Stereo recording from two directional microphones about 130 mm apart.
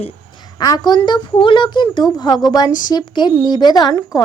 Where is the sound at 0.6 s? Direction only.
30° left (ahead or behind).